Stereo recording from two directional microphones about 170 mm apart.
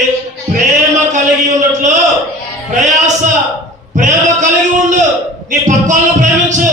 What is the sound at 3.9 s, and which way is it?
A man's voice, 45° right (ahead or behind).